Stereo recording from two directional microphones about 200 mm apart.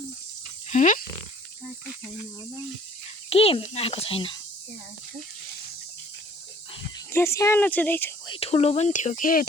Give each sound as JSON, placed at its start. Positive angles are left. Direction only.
{"t": 0.7, "sound": "speech", "side_deg": 40}
{"t": 3.2, "sound": "speech", "side_deg": 30}
{"t": 7.1, "sound": "speech", "side_deg": 15}
{"t": 8.3, "sound": "speech", "side_deg": 30}